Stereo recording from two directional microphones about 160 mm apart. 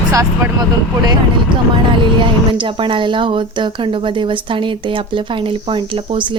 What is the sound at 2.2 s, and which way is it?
Speech, 30° right (ahead or behind).